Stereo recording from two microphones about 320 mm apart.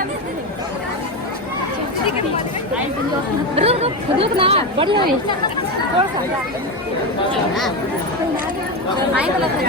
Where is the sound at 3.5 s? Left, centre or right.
Centre.